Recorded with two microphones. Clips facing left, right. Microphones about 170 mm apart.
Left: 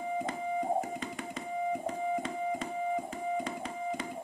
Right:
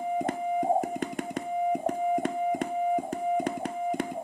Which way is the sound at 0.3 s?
55° right (ahead or behind).